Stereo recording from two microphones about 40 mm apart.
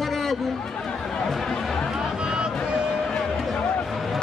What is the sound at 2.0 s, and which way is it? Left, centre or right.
Music, centre.